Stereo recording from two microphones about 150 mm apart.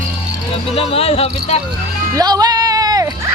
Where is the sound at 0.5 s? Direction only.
40° left (ahead or behind).